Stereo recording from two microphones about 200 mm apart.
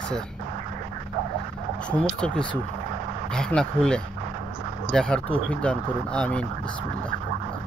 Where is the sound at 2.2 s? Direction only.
5° left (ahead or behind).